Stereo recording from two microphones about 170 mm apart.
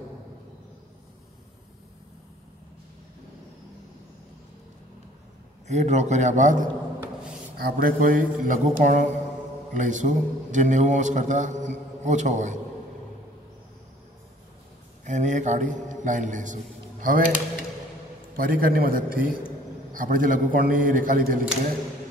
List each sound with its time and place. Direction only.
5.7 s a man's voice: 40° right (ahead or behind)
7.5 s a man's voice: 60° right (ahead or behind)
15.0 s a man's voice: 45° right (ahead or behind)